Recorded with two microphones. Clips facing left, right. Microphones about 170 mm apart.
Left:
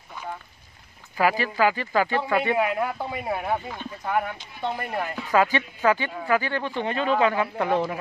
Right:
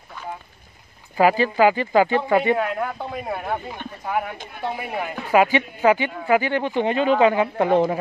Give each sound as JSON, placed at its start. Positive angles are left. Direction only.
{"t": 1.1, "sound": "speech", "side_deg": -25}
{"t": 2.5, "sound": "speech", "side_deg": 5}
{"t": 5.3, "sound": "speech", "side_deg": -20}